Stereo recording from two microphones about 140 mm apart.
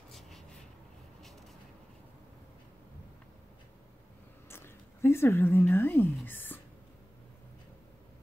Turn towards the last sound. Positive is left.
turn(degrees=15)  # may be behind; listen again after turning